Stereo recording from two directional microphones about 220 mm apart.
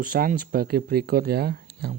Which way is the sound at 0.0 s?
40° right (ahead or behind).